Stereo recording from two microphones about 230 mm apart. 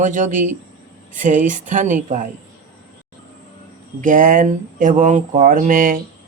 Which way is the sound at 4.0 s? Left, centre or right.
Right.